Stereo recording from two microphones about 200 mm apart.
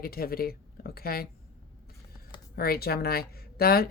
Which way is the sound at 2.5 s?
50° left (ahead or behind).